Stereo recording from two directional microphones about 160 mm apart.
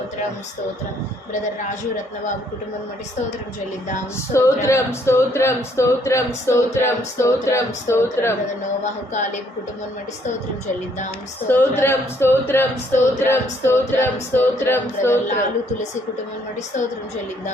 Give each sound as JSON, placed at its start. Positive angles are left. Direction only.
{"t": 4.3, "sound": "speech", "side_deg": 15}
{"t": 8.8, "sound": "speech", "side_deg": 50}
{"t": 11.4, "sound": "speech", "side_deg": 15}